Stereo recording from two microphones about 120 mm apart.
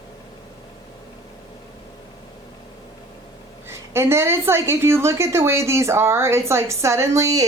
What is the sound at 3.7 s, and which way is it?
A woman's voice, 20° right (ahead or behind).